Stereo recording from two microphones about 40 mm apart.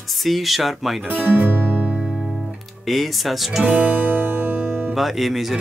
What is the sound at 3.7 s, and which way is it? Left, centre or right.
Music, right.